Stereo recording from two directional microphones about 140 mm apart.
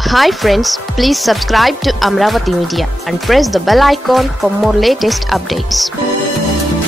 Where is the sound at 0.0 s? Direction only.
Centre (ahead or behind).